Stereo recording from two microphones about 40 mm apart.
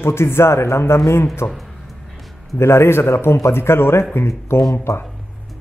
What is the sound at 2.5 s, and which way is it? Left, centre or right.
Speech, left.